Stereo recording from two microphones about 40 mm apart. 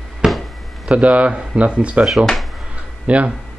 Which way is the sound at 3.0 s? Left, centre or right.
Right.